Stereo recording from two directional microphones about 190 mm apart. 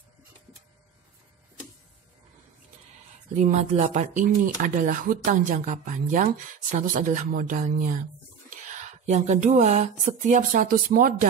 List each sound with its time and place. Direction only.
3.3 s speech: 40° right (ahead or behind)